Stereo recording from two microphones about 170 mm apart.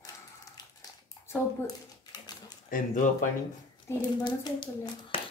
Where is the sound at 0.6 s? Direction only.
25° left (ahead or behind).